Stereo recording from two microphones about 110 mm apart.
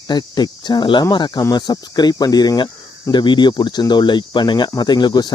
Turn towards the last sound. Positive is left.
turn(degrees=40)  # may be behind; listen again after turning